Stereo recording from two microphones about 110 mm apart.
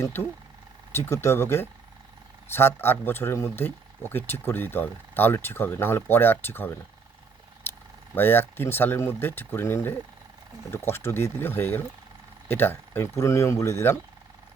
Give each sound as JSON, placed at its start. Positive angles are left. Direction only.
{"t": 0.0, "sound": "speech", "side_deg": 20}
{"t": 8.1, "sound": "speech", "side_deg": 20}